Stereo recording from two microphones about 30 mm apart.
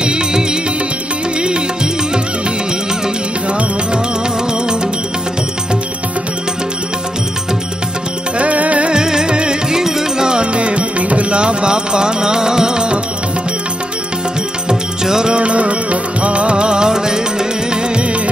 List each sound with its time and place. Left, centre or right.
0.0 s music: right
3.4 s music: right
8.4 s music: right
9.0 s music: right
9.7 s music: centre
10.2 s music: right
14.7 s music: right
15.3 s music: right
17.9 s music: right